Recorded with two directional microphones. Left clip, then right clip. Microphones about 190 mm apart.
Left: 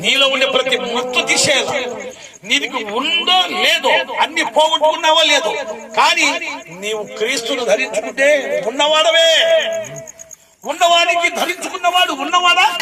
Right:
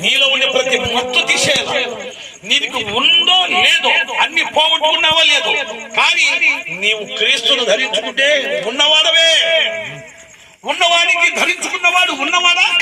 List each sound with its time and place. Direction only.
0.0 s a man's voice: 5° left (ahead or behind)
7.8 s a man's voice: 15° right (ahead or behind)
10.8 s a man's voice: 25° right (ahead or behind); by 12.8 s 5° right (ahead or behind)